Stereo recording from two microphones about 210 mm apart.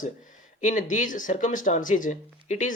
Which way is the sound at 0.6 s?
35° left (ahead or behind).